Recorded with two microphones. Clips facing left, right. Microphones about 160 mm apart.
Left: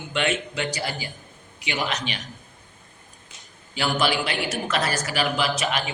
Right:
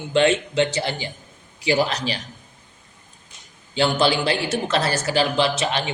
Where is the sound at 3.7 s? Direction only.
30° right (ahead or behind).